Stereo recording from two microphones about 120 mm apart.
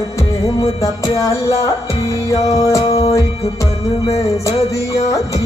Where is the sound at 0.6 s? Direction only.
25° left (ahead or behind).